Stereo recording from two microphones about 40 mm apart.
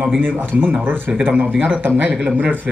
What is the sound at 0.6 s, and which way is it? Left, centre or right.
A man's voice, right.